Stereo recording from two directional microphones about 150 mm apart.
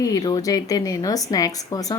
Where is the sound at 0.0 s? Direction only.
25° left (ahead or behind).